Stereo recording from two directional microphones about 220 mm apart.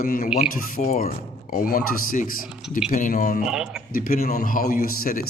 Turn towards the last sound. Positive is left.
turn(degrees=40)  # may be behind; listen again after turning